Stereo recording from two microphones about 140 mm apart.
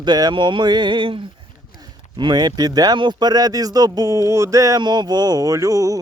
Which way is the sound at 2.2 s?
30° right (ahead or behind).